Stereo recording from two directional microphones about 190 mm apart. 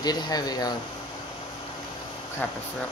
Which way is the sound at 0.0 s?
20° left (ahead or behind).